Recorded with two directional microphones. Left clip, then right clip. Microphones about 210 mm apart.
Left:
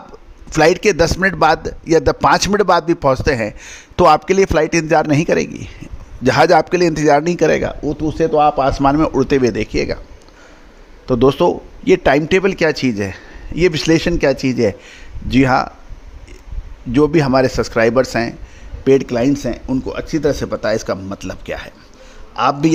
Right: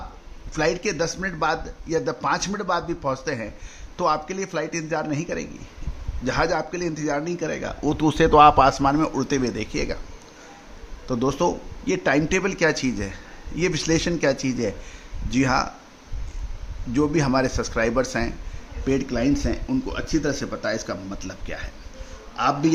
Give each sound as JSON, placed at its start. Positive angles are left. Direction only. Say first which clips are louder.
{"t": 0.5, "sound": "a man's voice", "louder": "left 11 dB", "side_deg": 50}
{"t": 7.8, "sound": "speech", "louder": "left 3 dB", "side_deg": 5}
{"t": 8.6, "sound": "speech", "louder": "left 5 dB", "side_deg": 30}
{"t": 11.0, "sound": "speech", "louder": "left 10 dB", "side_deg": 35}
{"t": 16.9, "sound": "speech", "louder": "left 9 dB", "side_deg": 35}
{"t": 18.9, "sound": "a man's voice", "louder": "left 10 dB", "side_deg": 50}